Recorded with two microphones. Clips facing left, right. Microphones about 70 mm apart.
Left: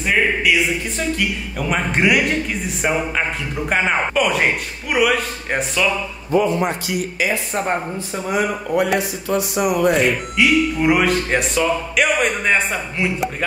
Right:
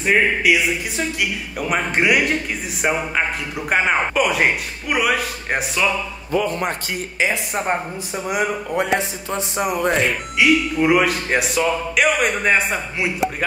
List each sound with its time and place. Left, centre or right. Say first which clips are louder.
0.0 s speech: right 1 dB; centre
6.4 s speech: left 3 dB; right
6.9 s speech: left 1 dB; right
7.5 s speech: left 1 dB; centre
9.8 s speech: left 3 dB; centre